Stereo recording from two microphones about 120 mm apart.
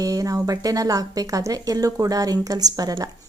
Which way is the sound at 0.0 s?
30° right (ahead or behind).